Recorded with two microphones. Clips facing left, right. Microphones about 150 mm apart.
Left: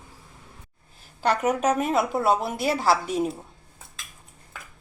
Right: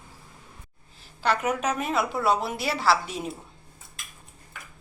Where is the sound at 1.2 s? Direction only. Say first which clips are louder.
Left 3 dB; 45° left (ahead or behind).